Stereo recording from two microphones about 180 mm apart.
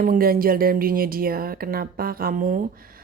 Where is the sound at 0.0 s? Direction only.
50° right (ahead or behind).